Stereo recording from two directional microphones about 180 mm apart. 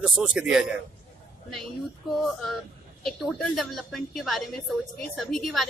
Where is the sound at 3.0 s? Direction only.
Centre (ahead or behind).